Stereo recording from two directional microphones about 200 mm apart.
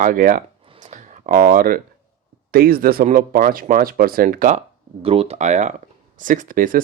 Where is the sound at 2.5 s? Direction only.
50° right (ahead or behind).